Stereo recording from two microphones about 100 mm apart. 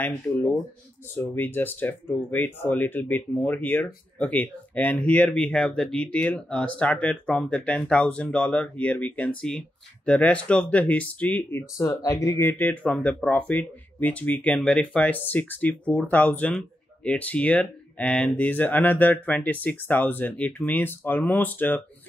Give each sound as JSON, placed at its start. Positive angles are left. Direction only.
{"t": 1.3, "sound": "speech", "side_deg": 20}
{"t": 12.0, "sound": "speech", "side_deg": 35}